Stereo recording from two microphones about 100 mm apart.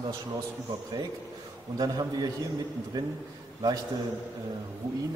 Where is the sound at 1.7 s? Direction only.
40° right (ahead or behind).